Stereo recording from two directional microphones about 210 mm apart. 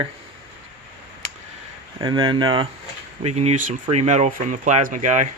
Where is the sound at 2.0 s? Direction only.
20° right (ahead or behind).